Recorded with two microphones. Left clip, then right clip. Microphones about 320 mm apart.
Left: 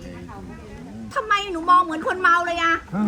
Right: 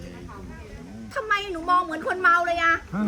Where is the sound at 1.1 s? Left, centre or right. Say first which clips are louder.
Left 4 dB; centre.